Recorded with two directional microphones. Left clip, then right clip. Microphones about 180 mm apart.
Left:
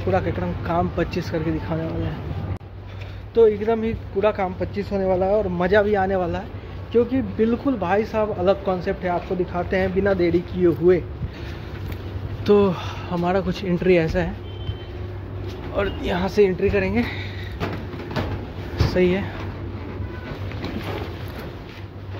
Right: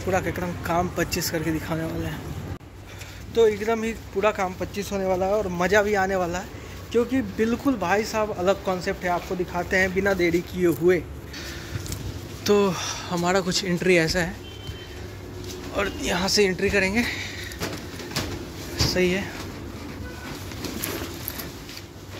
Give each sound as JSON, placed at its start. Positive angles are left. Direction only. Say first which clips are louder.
{"t": 0.1, "sound": "speech", "louder": "left 2 dB", "side_deg": -5}
{"t": 3.3, "sound": "speech", "louder": "left 3 dB", "side_deg": -5}
{"t": 12.4, "sound": "speech", "louder": "left 3 dB", "side_deg": 0}
{"t": 15.7, "sound": "speech", "louder": "left 2 dB", "side_deg": 0}
{"t": 18.9, "sound": "speech", "louder": "left 5 dB", "side_deg": 5}